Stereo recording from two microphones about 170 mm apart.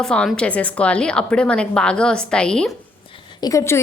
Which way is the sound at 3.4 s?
15° left (ahead or behind).